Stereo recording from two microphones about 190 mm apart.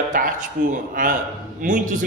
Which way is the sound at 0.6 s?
45° right (ahead or behind).